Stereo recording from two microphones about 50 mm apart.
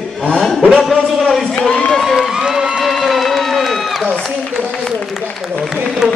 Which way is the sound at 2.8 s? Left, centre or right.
Centre.